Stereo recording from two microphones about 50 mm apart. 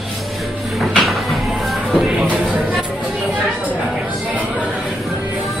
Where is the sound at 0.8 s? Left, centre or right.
Centre.